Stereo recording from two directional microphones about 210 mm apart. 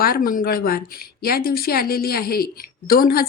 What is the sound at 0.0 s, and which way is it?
Speech, 45° left (ahead or behind).